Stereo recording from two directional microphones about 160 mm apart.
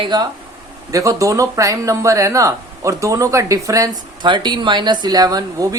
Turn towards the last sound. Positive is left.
turn(degrees=-25)  # may be behind; listen again after turning